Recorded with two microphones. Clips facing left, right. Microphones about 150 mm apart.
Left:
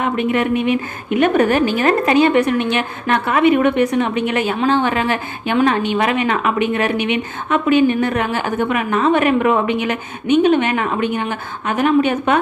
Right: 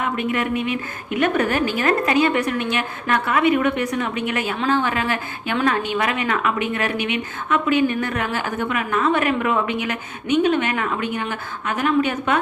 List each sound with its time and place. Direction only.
0.0 s speech: 25° left (ahead or behind)